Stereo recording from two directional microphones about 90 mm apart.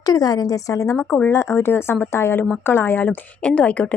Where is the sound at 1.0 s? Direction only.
15° left (ahead or behind).